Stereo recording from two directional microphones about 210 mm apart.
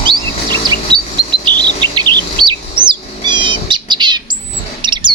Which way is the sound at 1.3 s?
20° right (ahead or behind).